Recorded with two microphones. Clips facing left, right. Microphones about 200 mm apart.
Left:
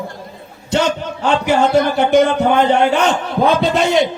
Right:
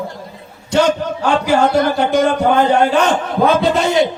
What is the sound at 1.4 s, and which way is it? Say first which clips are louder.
A man's voice: even; 20° left (ahead or behind).